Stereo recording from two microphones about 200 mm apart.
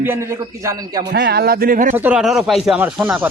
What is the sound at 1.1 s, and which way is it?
Speech, 50° right (ahead or behind).